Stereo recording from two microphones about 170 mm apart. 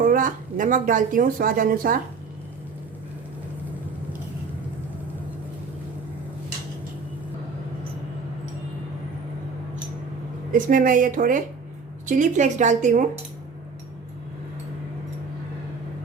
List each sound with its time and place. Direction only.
0.0 s speech: 55° right (ahead or behind)
10.5 s speech: 50° right (ahead or behind)